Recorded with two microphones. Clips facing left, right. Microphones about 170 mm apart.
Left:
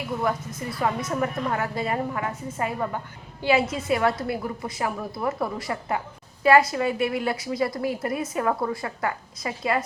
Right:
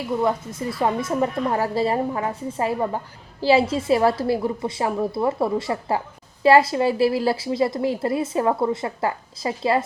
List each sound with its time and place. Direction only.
0.2 s a woman's voice: 25° right (ahead or behind)